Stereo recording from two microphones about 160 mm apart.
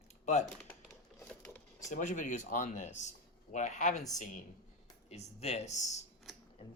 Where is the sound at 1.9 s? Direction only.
50° left (ahead or behind).